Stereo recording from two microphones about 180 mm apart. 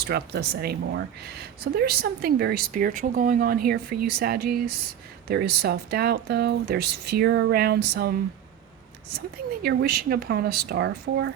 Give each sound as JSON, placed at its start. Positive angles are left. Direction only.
{"t": 0.0, "sound": "speech", "side_deg": -60}
{"t": 9.6, "sound": "speech", "side_deg": -60}